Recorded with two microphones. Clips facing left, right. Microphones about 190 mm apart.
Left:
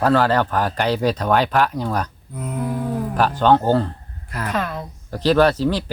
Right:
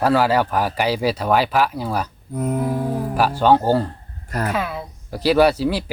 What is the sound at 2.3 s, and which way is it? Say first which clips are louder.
Speech: right 9 dB; 45° right (ahead or behind).